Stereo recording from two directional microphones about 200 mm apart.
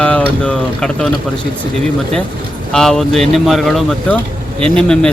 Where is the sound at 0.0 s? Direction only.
5° left (ahead or behind).